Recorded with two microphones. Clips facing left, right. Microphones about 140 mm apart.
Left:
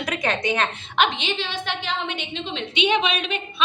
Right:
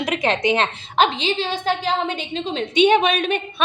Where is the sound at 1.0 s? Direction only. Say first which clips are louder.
Right 4 dB; 35° right (ahead or behind).